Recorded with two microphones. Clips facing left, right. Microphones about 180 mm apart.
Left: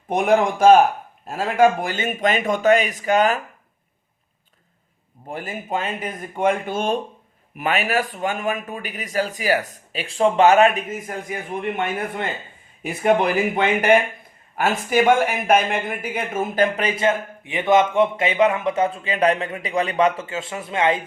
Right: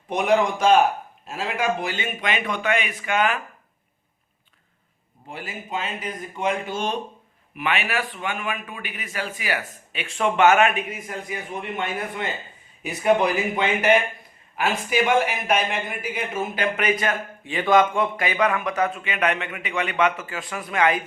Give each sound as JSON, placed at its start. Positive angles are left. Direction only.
{"t": 0.1, "sound": "speech", "side_deg": 50}
{"t": 5.3, "sound": "a man's voice", "side_deg": 50}
{"t": 12.8, "sound": "speech", "side_deg": 50}
{"t": 16.7, "sound": "a man's voice", "side_deg": 30}